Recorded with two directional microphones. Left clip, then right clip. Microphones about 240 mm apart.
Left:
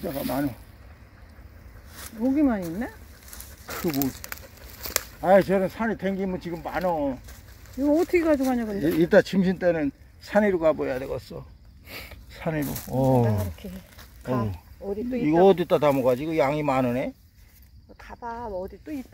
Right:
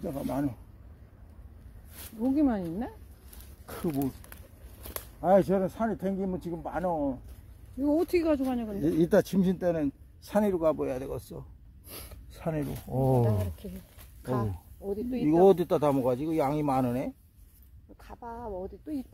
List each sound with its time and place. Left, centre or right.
0.2 s speech: centre
2.3 s speech: centre
4.0 s speech: left
4.8 s a sound: left
5.2 s speech: centre
8.8 s speech: centre
14.2 s speech: centre